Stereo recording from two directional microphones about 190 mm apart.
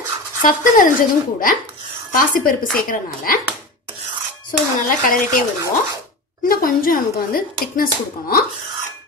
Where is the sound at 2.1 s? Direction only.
45° left (ahead or behind).